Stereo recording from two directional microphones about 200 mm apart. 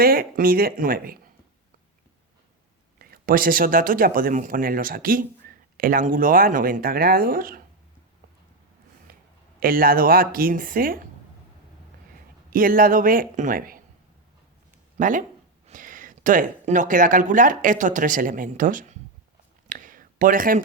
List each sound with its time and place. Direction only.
0.0 s speech: 45° right (ahead or behind)
3.0 s speech: 45° right (ahead or behind)
9.1 s a sound: 50° right (ahead or behind)
9.6 s speech: 45° right (ahead or behind)
12.5 s speech: 45° right (ahead or behind)
14.9 s speech: 40° right (ahead or behind)
19.6 s a sound: 40° right (ahead or behind)